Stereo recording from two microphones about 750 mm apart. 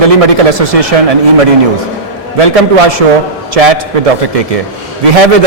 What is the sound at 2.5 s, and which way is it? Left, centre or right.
Speech, right.